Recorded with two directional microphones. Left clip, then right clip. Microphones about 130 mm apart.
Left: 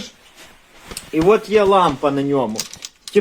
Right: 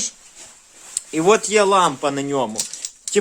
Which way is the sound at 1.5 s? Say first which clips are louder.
Left 3 dB; 10° right (ahead or behind).